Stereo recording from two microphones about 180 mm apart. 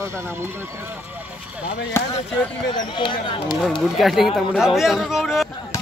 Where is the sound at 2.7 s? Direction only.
25° left (ahead or behind).